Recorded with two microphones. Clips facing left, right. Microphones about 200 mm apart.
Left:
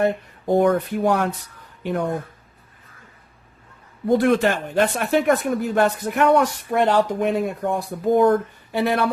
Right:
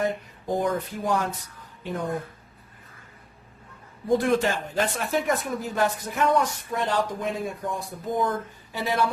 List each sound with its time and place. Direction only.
0.0 s speech: 60° left (ahead or behind)
4.2 s speech: 65° left (ahead or behind)